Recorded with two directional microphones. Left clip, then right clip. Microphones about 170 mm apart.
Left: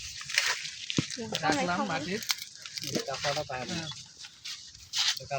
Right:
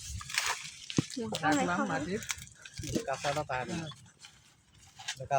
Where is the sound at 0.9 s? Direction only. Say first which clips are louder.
Left 2 dB; 45° right (ahead or behind).